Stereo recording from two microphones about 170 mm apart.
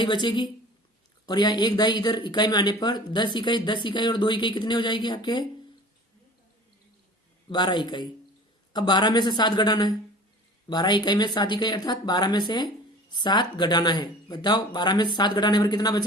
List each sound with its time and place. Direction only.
0.0 s speech: 25° left (ahead or behind)
7.5 s speech: 25° left (ahead or behind)